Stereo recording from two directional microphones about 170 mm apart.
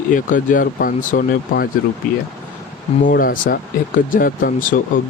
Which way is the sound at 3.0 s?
55° left (ahead or behind).